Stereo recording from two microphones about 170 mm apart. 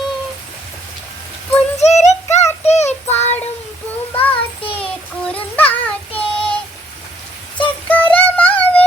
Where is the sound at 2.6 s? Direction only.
40° left (ahead or behind).